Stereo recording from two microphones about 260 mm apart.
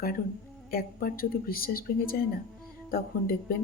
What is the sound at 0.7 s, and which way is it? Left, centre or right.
A woman's voice, left.